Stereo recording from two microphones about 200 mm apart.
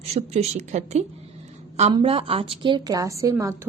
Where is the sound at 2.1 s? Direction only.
30° right (ahead or behind).